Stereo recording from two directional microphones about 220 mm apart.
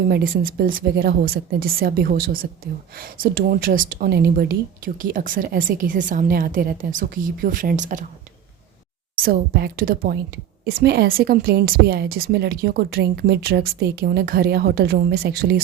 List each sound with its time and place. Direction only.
0.1 s a woman's voice: 40° right (ahead or behind)
9.2 s a woman's voice: 45° right (ahead or behind)